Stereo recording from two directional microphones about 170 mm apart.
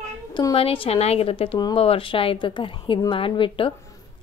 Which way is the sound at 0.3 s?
25° left (ahead or behind).